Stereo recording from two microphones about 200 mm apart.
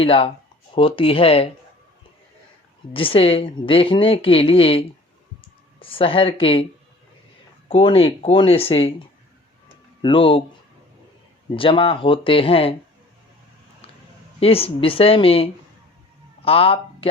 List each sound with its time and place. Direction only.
0.0 s a woman's voice: 30° left (ahead or behind)
2.9 s a woman's voice: 25° left (ahead or behind)
7.7 s a woman's voice: 25° left (ahead or behind)
10.0 s a woman's voice: 25° left (ahead or behind)
11.5 s a woman's voice: 25° left (ahead or behind)
14.3 s a woman's voice: 30° left (ahead or behind)